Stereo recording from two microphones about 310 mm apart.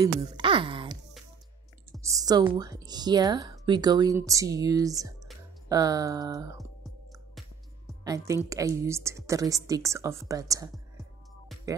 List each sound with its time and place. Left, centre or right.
0.0 s speech: centre
2.0 s speech: centre
8.0 s a woman's voice: centre